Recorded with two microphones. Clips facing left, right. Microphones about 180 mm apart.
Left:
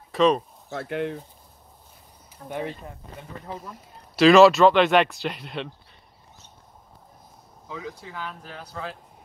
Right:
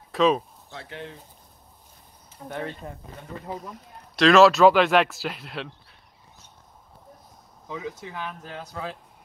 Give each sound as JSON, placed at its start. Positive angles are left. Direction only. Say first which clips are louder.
{"t": 0.1, "sound": "speech", "louder": "left 1 dB", "side_deg": 0}
{"t": 0.7, "sound": "speech", "louder": "left 10 dB", "side_deg": 60}
{"t": 2.4, "sound": "speech", "louder": "left 1 dB", "side_deg": 10}
{"t": 7.6, "sound": "speech", "louder": "right 2 dB", "side_deg": -20}